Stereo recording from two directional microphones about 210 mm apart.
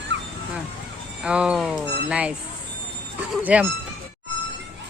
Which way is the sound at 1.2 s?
5° right (ahead or behind).